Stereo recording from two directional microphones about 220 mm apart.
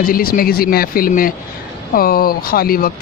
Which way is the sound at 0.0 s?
40° left (ahead or behind).